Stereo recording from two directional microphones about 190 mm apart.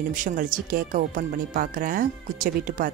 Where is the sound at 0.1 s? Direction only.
45° right (ahead or behind).